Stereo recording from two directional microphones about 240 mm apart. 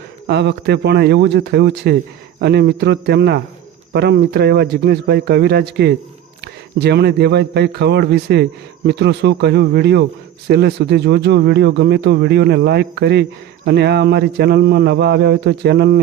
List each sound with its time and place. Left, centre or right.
0.3 s speech: right